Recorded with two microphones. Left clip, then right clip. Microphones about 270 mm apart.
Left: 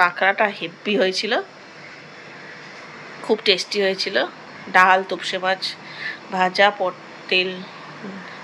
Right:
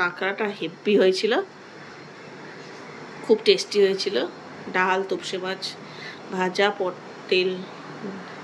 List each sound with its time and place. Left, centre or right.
0.0 s a woman's voice: centre
3.3 s a woman's voice: centre